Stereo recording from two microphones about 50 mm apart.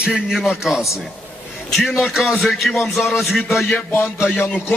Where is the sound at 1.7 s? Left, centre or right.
Centre.